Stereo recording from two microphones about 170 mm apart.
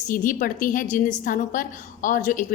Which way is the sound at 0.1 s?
55° left (ahead or behind).